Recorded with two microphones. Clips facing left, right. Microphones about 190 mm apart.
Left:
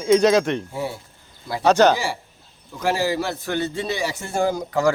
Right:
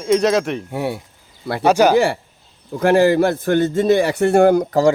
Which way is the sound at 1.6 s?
10° right (ahead or behind).